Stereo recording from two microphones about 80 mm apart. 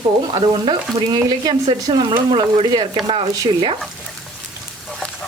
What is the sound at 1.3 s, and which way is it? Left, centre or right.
Speech, right.